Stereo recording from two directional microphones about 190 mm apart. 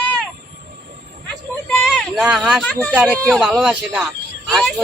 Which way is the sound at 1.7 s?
5° left (ahead or behind).